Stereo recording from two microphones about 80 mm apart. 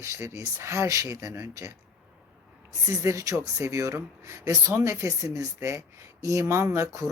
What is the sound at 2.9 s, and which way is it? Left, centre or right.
Speech, right.